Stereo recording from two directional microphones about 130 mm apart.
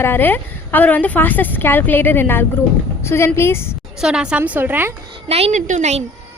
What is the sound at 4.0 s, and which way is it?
Speech, 5° right (ahead or behind).